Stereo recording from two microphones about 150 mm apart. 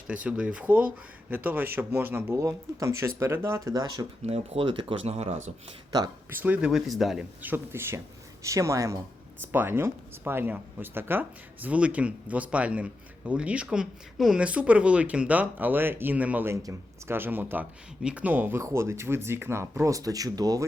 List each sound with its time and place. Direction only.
0.1 s speech: 10° right (ahead or behind); by 4.0 s 25° right (ahead or behind)
4.2 s speech: 45° right (ahead or behind)
6.3 s speech: 10° right (ahead or behind)
7.4 s speech: 15° right (ahead or behind)